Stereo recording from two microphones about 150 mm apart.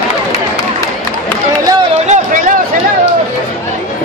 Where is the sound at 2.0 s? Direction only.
50° right (ahead or behind).